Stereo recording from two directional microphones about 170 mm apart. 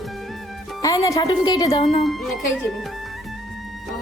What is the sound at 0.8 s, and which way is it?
A woman's voice, 20° left (ahead or behind).